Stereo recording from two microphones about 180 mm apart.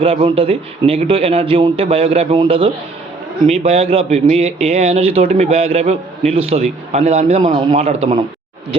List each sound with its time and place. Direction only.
0.0 s a man's voice: 30° right (ahead or behind)